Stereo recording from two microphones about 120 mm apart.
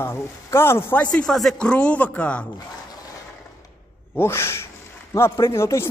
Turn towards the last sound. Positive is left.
turn(degrees=20)  # may be behind; listen again after turning